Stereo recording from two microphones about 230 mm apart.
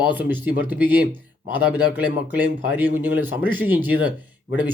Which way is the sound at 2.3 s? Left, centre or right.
Centre.